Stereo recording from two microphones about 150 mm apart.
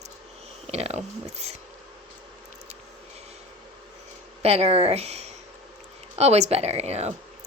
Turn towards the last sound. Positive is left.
turn(degrees=-45)  # may be behind; listen again after turning